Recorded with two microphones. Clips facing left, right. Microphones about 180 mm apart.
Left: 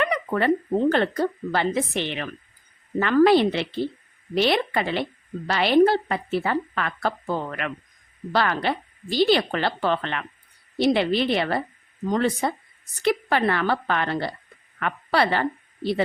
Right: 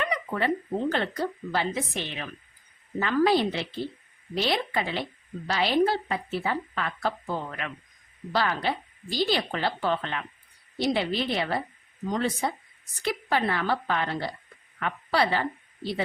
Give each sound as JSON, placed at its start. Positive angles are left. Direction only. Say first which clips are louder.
{"t": 0.0, "sound": "a woman's voice", "louder": "left 5 dB", "side_deg": 60}